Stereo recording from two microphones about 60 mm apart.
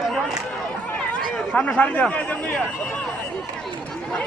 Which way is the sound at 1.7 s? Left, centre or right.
Left.